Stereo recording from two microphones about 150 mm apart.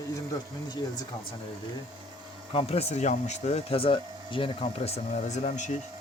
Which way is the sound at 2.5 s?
40° left (ahead or behind).